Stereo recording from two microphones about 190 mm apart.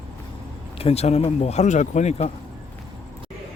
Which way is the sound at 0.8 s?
35° left (ahead or behind).